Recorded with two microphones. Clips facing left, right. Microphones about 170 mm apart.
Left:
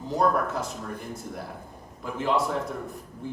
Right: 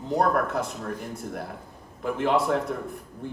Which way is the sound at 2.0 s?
55° right (ahead or behind).